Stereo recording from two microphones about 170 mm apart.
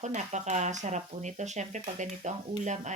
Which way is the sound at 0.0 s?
45° right (ahead or behind).